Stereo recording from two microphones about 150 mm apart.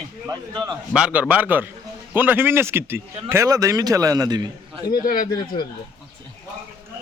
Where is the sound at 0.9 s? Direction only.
5° right (ahead or behind); by 4.8 s 25° right (ahead or behind).